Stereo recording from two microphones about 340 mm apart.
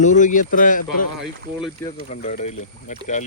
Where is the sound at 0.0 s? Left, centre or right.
Left.